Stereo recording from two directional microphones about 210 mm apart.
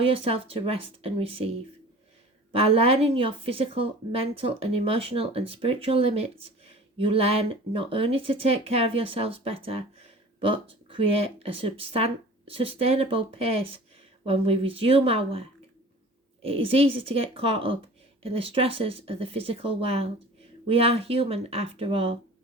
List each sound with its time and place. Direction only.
0.0 s speech: 25° right (ahead or behind)
2.6 s speech: 30° right (ahead or behind)